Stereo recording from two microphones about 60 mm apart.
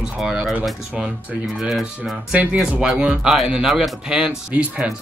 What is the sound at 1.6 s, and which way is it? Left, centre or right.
Speech, centre.